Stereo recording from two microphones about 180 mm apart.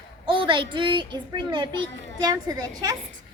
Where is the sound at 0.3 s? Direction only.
25° right (ahead or behind).